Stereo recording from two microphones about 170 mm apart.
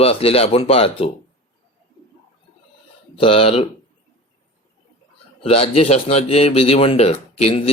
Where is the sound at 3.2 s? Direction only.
35° left (ahead or behind).